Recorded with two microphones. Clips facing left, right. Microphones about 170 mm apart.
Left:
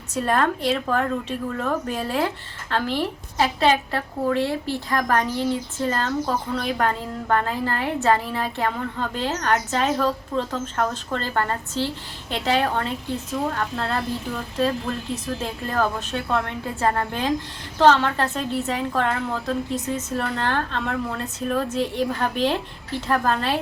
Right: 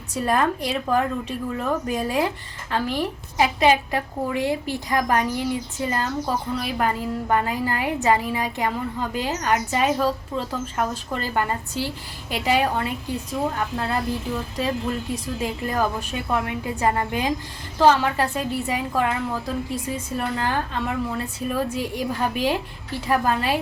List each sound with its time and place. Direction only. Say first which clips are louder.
0.1 s a woman's voice: even; 10° right (ahead or behind)
15.1 s a woman's voice: right 1 dB; 10° right (ahead or behind)